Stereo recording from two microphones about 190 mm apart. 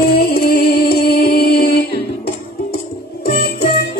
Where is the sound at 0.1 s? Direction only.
55° left (ahead or behind).